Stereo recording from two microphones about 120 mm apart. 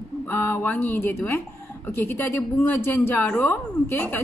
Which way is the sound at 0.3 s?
15° left (ahead or behind).